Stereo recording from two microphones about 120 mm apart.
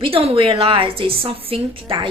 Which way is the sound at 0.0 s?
50° right (ahead or behind).